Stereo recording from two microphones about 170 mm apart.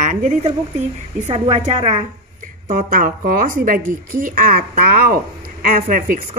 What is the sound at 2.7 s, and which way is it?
A woman's voice, 55° right (ahead or behind).